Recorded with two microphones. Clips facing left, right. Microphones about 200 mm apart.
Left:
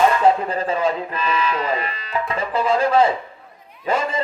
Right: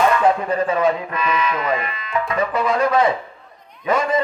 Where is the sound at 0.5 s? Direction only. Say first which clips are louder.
Right 3 dB; 30° left (ahead or behind).